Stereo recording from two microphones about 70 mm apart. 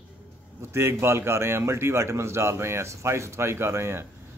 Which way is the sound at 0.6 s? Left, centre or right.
Right.